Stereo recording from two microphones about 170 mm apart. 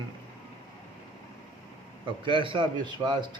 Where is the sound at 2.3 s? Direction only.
30° right (ahead or behind).